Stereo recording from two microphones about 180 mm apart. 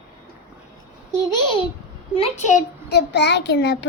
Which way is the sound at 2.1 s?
35° left (ahead or behind).